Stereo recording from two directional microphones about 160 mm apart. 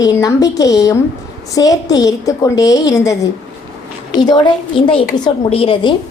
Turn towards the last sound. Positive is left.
turn(degrees=30)  # may be behind; listen again after turning